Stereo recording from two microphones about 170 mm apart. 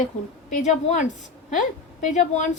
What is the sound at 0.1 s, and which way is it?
A woman's voice, 45° left (ahead or behind).